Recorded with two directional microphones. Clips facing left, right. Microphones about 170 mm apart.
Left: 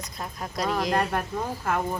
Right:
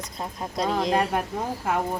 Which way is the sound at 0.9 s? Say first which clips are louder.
Right 2 dB; 10° right (ahead or behind).